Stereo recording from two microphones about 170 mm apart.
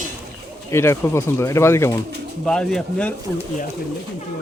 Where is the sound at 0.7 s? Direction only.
15° left (ahead or behind).